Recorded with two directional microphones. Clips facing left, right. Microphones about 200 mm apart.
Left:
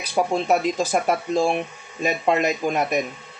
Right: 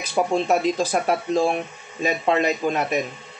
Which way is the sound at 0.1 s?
10° left (ahead or behind).